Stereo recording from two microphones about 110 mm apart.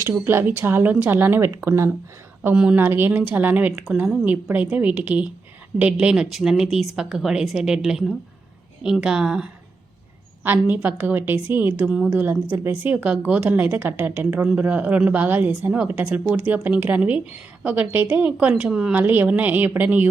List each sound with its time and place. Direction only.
0.0 s a woman's voice: 20° right (ahead or behind); by 9.5 s 5° right (ahead or behind)
10.4 s a woman's voice: 15° right (ahead or behind)
11.9 s a woman's voice: 5° right (ahead or behind)
12.1 s a woman's voice: 15° right (ahead or behind)